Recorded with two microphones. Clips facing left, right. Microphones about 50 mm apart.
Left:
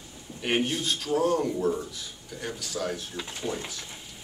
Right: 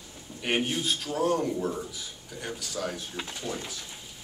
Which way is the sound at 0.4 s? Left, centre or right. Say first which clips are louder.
Left 1 dB; centre.